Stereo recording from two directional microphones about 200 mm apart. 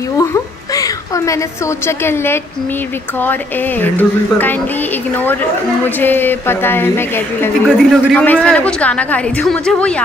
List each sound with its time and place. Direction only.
0.2 s a sound: 15° left (ahead or behind)
1.9 s speech: 10° left (ahead or behind)
3.8 s speech: 10° left (ahead or behind)
5.9 s speech: 10° left (ahead or behind)
7.6 s speech: centre (ahead or behind)